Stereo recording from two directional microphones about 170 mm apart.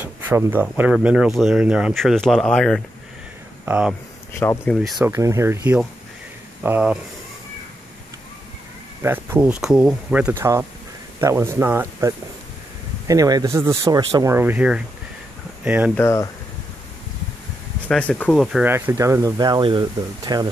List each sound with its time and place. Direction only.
0.0 s speech: 15° right (ahead or behind); by 2.8 s 5° left (ahead or behind)
3.6 s speech: 10° right (ahead or behind)
4.3 s speech: 15° left (ahead or behind)
4.6 s speech: centre (ahead or behind)
5.0 s speech: 15° right (ahead or behind)
9.0 s speech: 10° right (ahead or behind)
15.9 s speech: 15° left (ahead or behind)
17.8 s speech: 5° left (ahead or behind)
18.6 s speech: 15° right (ahead or behind)